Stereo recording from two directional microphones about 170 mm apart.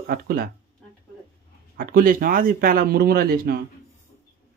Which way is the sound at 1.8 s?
55° right (ahead or behind).